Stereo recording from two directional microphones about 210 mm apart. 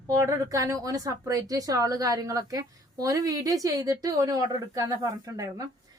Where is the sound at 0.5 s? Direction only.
15° right (ahead or behind).